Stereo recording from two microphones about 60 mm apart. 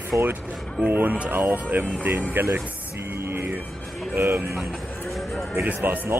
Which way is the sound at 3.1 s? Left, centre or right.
Right.